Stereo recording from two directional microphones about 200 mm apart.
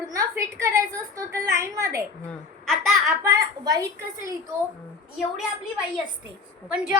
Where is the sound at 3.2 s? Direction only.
20° right (ahead or behind).